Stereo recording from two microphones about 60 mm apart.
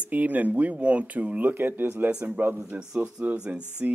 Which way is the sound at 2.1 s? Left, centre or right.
Centre.